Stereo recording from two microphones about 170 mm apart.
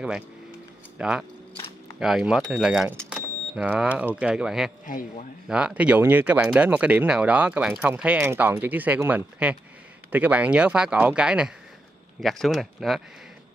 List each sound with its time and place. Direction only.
0.9 s speech: 5° right (ahead or behind)
4.8 s speech: 50° left (ahead or behind)
5.5 s speech: 5° right (ahead or behind)